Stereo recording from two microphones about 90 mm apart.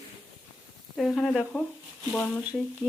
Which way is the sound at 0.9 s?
10° left (ahead or behind).